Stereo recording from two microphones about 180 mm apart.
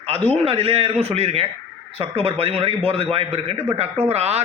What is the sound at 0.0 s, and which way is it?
A man's voice, 30° right (ahead or behind).